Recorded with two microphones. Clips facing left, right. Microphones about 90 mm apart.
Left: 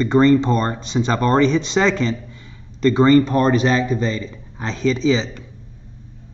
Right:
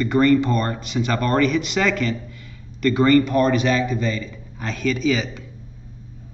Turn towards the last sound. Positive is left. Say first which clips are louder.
# left 3 dB
turn(degrees=25)  # may be behind; listen again after turning